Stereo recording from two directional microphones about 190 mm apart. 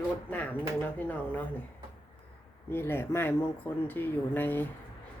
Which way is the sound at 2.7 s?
10° left (ahead or behind).